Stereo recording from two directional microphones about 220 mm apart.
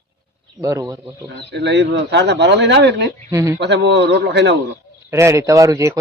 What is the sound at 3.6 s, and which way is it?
Speech, 50° right (ahead or behind).